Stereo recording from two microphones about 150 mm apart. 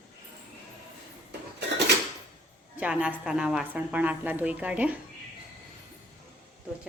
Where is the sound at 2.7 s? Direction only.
5° right (ahead or behind).